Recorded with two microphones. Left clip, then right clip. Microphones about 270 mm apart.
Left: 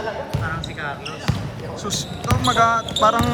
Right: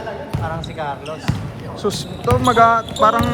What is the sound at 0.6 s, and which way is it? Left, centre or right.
Speech, centre.